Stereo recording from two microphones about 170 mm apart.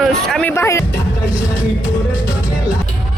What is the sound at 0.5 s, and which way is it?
Speech, 15° left (ahead or behind).